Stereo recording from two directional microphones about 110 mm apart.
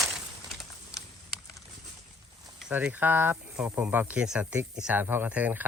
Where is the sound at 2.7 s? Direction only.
15° right (ahead or behind).